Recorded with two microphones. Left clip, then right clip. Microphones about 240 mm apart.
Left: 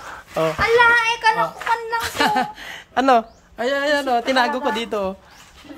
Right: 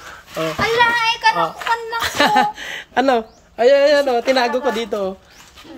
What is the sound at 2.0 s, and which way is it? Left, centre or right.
A woman's voice, centre.